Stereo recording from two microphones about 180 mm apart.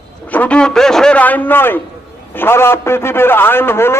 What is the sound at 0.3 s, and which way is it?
A man's voice, 10° left (ahead or behind).